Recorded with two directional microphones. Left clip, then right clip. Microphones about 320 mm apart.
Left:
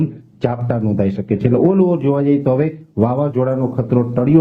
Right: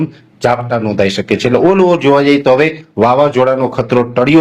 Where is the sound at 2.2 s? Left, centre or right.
Centre.